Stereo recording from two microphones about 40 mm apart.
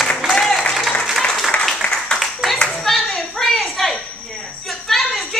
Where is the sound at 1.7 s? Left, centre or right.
Centre.